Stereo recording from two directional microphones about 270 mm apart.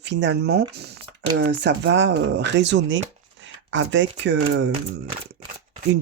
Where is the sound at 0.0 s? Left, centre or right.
Right.